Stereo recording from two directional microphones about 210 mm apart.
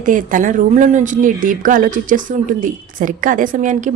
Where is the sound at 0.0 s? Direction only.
40° right (ahead or behind).